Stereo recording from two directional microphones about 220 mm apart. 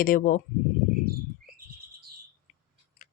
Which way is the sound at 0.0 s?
40° left (ahead or behind).